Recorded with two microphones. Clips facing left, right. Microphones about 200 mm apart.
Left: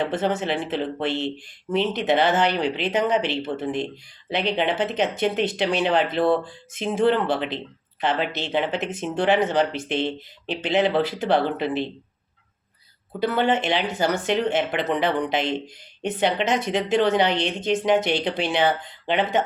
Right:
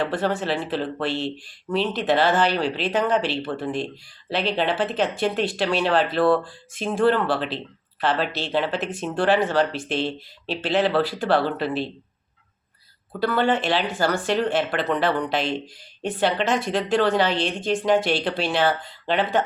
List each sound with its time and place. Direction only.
0.0 s speech: 20° left (ahead or behind)
13.1 s speech: 20° left (ahead or behind)